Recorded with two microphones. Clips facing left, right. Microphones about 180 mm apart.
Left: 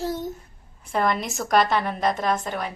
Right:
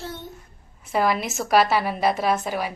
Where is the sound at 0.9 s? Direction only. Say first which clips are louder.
Right 1 dB; 5° right (ahead or behind).